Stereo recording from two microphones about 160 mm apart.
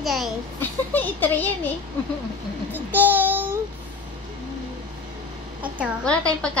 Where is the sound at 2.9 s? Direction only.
10° right (ahead or behind).